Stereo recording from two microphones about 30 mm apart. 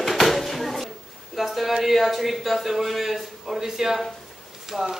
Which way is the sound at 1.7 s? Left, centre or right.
Centre.